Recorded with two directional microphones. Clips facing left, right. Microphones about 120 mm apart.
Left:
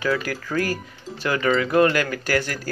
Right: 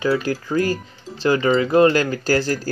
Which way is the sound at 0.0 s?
25° right (ahead or behind).